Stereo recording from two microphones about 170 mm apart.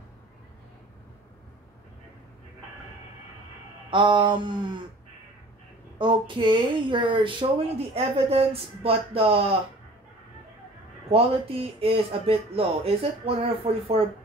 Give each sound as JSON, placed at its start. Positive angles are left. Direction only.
{"t": 3.9, "sound": "a woman's voice", "side_deg": -30}
{"t": 5.9, "sound": "a woman's voice", "side_deg": -30}
{"t": 11.1, "sound": "speech", "side_deg": -35}